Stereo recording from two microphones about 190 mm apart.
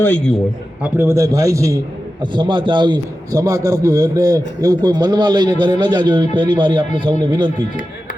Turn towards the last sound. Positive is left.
turn(degrees=-25)  # may be behind; listen again after turning